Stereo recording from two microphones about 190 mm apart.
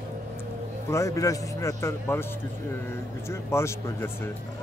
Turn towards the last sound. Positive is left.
turn(degrees=15)  # may be behind; listen again after turning